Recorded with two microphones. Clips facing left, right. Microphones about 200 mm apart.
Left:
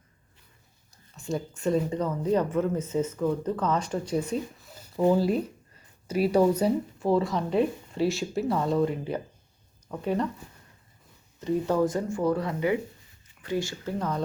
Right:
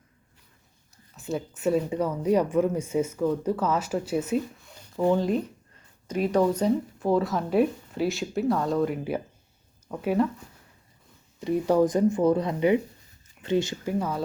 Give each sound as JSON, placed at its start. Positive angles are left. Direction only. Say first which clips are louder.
{"t": 1.1, "sound": "speech", "louder": "even", "side_deg": -5}
{"t": 11.3, "sound": "speech", "louder": "right 3 dB", "side_deg": -15}